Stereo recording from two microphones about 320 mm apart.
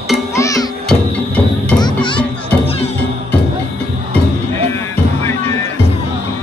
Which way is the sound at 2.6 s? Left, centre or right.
Centre.